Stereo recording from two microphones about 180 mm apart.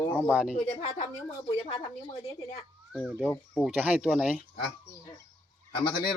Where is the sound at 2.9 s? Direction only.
Centre (ahead or behind).